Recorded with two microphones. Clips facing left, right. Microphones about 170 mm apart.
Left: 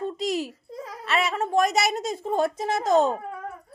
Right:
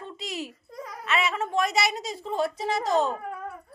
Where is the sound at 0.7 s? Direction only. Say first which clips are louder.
Left 1 dB; 25° left (ahead or behind).